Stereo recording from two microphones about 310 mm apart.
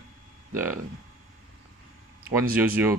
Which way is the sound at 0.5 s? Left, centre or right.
Centre.